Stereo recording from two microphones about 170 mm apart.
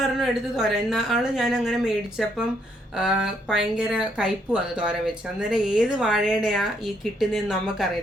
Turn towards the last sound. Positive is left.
turn(degrees=0)  # may be behind; listen again after turning